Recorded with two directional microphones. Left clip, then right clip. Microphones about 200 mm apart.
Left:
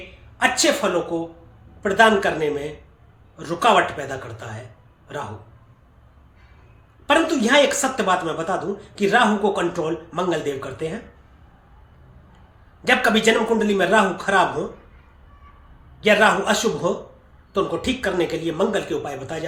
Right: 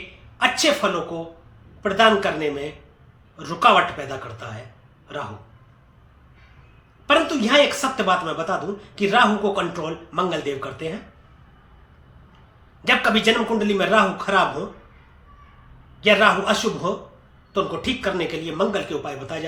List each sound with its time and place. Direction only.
0.3 s a woman's voice: 15° left (ahead or behind)
7.1 s speech: 15° left (ahead or behind)
12.8 s speech: 15° left (ahead or behind)
16.0 s speech: 20° left (ahead or behind)